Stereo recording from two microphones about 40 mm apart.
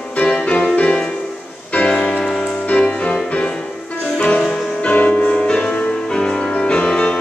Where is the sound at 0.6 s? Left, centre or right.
Left.